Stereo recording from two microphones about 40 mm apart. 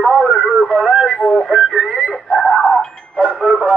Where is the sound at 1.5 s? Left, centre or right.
Centre.